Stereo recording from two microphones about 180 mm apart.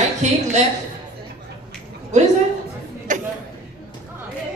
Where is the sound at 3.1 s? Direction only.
45° right (ahead or behind).